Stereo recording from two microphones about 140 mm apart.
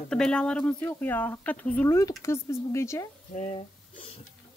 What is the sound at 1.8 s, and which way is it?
Speech, 20° left (ahead or behind).